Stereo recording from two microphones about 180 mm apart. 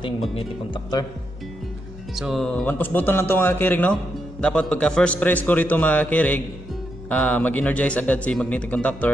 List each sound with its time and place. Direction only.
0.3 s speech: 25° left (ahead or behind)
2.1 s speech: centre (ahead or behind)